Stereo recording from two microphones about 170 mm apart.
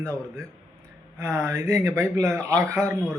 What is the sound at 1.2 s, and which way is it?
A man's voice, 15° right (ahead or behind).